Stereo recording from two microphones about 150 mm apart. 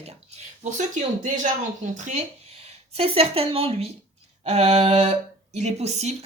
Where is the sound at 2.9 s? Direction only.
40° right (ahead or behind).